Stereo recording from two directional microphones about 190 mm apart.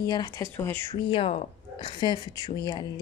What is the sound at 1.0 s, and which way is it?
Speech, 30° left (ahead or behind).